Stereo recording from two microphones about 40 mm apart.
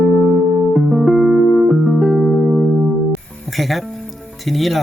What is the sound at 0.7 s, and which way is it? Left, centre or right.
Music, centre.